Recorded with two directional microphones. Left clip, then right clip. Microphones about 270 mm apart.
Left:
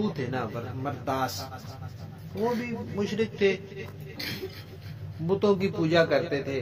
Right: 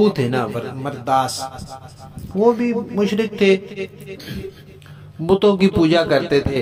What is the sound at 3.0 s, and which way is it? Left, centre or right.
Speech, right.